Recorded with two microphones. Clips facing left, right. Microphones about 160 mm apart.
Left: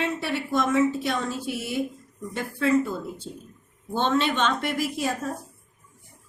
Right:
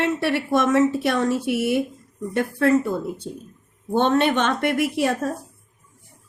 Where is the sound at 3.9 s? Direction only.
60° right (ahead or behind).